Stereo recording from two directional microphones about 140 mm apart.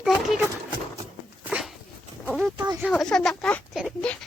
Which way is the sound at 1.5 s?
10° right (ahead or behind).